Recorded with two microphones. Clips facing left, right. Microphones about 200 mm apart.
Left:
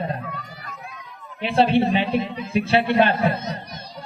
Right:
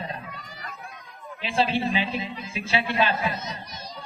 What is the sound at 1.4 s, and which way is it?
Speech, 60° left (ahead or behind).